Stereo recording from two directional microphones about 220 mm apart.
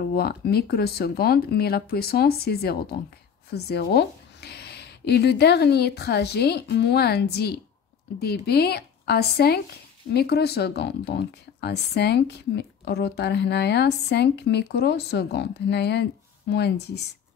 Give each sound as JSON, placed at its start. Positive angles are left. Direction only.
{"t": 0.1, "sound": "speech", "side_deg": 45}